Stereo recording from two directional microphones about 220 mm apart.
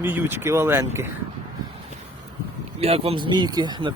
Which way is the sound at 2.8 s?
25° right (ahead or behind).